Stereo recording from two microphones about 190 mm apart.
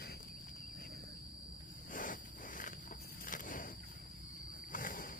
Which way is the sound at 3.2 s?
45° left (ahead or behind).